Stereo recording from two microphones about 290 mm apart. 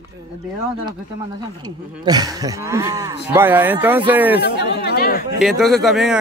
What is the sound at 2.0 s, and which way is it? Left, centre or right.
Speech, centre.